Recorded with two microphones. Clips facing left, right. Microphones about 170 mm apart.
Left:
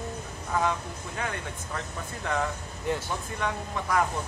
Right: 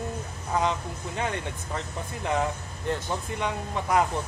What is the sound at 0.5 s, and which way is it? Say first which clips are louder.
Speech: right 1 dB; 20° right (ahead or behind).